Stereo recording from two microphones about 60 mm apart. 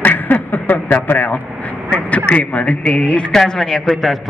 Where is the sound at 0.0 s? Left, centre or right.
Left.